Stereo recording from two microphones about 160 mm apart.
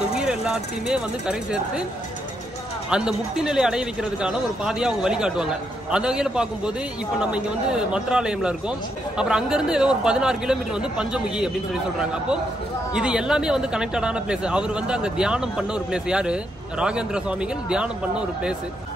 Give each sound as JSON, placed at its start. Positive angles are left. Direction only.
{"t": 0.1, "sound": "speech", "side_deg": -5}
{"t": 2.9, "sound": "a man's voice", "side_deg": -5}